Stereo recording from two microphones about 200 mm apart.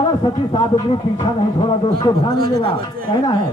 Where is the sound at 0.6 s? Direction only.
20° left (ahead or behind).